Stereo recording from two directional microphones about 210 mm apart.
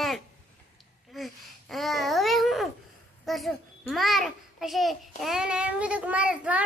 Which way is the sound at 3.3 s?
Centre (ahead or behind).